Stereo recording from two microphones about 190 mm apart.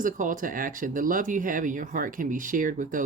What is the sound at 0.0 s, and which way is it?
Speech, 45° right (ahead or behind).